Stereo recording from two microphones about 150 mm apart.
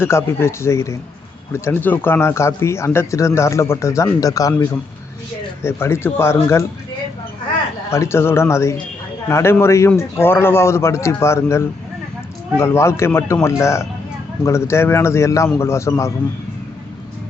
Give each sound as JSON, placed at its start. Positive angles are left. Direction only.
{"t": 0.0, "sound": "a man's voice", "side_deg": 15}
{"t": 7.9, "sound": "a man's voice", "side_deg": 20}